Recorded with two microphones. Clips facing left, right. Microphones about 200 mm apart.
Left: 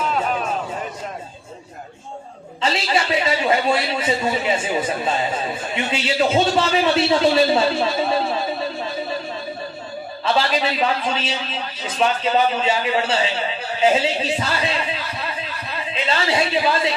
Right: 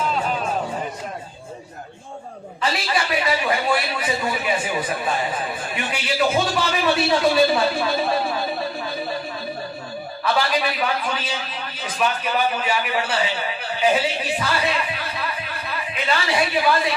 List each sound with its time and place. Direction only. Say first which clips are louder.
2.6 s a man's voice: left 3 dB; 25° left (ahead or behind)
10.2 s a man's voice: left 2 dB; 25° left (ahead or behind)